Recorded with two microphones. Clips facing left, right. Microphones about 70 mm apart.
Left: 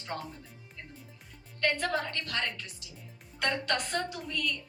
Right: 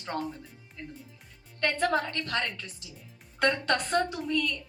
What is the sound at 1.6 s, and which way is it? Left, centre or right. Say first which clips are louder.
A woman's voice: right 3 dB; right.